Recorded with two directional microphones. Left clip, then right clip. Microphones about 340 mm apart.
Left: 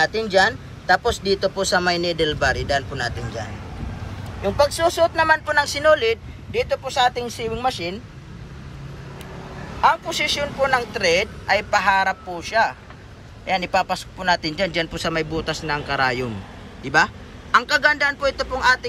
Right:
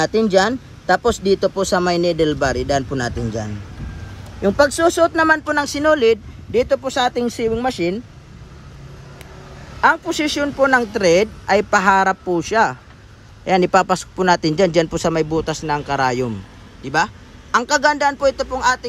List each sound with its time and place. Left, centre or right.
0.0 s speech: right
4.5 s speech: right
9.8 s a man's voice: right